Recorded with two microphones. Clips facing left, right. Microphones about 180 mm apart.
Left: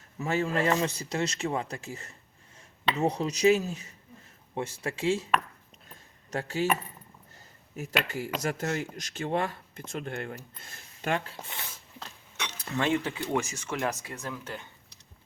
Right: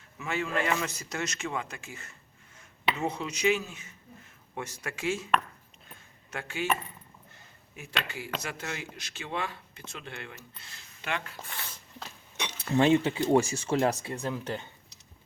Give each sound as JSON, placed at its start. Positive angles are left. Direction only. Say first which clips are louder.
{"t": 0.2, "sound": "a man's voice", "louder": "left 3 dB", "side_deg": 40}
{"t": 5.9, "sound": "a sound", "louder": "left 6 dB", "side_deg": 40}
{"t": 8.0, "sound": "speech", "louder": "left 6 dB", "side_deg": 45}
{"t": 11.3, "sound": "speech", "louder": "left 1 dB", "side_deg": 20}
{"t": 11.7, "sound": "a sound", "louder": "right 1 dB", "side_deg": 0}
{"t": 12.5, "sound": "speech", "louder": "right 5 dB", "side_deg": -25}